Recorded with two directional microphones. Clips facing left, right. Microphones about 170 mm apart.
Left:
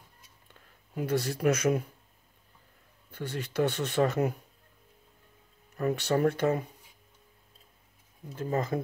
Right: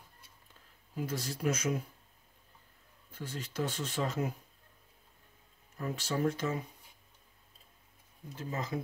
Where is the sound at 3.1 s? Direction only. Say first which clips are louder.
Left 7 dB; 70° left (ahead or behind).